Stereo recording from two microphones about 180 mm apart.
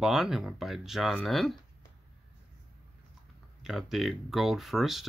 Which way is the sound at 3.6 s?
Centre (ahead or behind).